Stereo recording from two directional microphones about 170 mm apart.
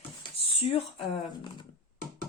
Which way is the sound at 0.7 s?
30° left (ahead or behind).